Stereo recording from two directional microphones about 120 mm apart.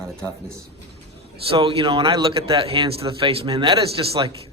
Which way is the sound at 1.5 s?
50° right (ahead or behind).